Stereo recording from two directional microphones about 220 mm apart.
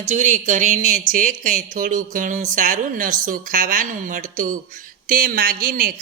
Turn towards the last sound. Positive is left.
turn(degrees=-40)  # may be behind; listen again after turning